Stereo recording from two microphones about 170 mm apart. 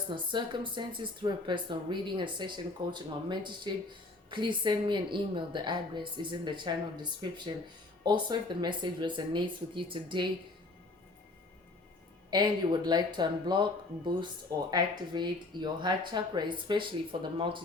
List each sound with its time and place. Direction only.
0.1 s speech: 30° right (ahead or behind)
12.3 s speech: 25° right (ahead or behind)